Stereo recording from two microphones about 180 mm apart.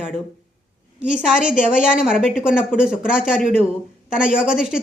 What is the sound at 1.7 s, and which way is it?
Speech, 50° left (ahead or behind).